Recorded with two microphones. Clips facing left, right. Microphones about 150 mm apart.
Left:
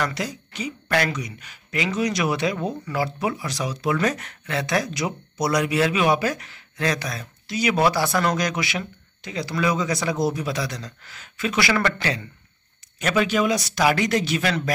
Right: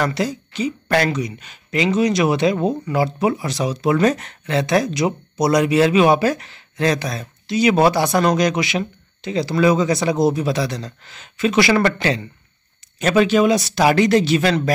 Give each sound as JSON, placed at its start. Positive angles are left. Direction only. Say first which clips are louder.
{"t": 0.0, "sound": "speech", "louder": "right 6 dB", "side_deg": -30}